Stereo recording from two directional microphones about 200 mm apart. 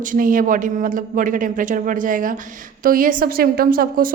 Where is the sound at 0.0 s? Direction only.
45° right (ahead or behind).